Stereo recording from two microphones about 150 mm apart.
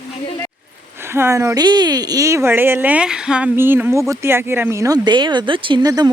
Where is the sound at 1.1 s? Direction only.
20° right (ahead or behind).